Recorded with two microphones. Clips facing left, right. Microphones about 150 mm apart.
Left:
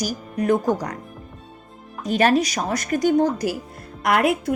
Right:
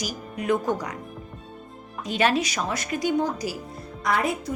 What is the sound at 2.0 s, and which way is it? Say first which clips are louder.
A woman's voice: left 5 dB; 45° left (ahead or behind).